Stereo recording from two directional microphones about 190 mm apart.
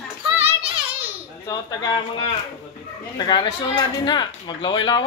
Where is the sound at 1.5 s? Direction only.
20° left (ahead or behind).